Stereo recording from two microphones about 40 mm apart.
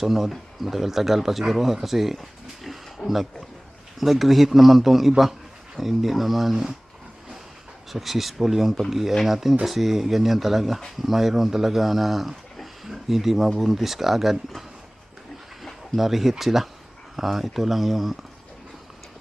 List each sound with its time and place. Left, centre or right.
0.0 s speech: centre
3.0 s speech: centre
4.0 s speech: centre
7.9 s speech: centre
12.5 s a sound: centre
13.6 s speech: centre
16.0 s speech: centre